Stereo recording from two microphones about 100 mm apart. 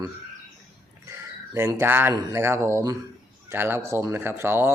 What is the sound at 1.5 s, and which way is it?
Speech, 25° right (ahead or behind).